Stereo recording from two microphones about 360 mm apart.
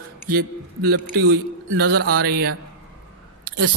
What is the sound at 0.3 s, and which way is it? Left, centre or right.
A man's voice, right.